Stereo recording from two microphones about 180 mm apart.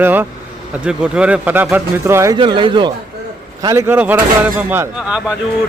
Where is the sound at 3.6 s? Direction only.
15° right (ahead or behind).